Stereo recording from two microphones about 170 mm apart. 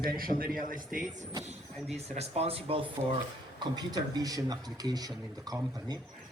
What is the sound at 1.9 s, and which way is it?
Speech, 40° right (ahead or behind).